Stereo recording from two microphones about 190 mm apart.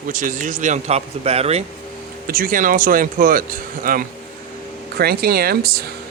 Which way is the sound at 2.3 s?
50° right (ahead or behind).